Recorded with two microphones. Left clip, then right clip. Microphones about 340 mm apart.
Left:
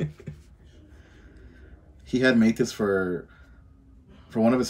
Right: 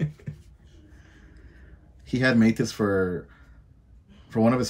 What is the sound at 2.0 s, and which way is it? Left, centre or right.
Speech, centre.